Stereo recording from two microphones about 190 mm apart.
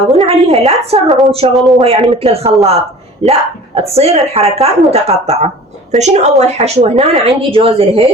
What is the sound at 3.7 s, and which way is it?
Speech, 35° right (ahead or behind).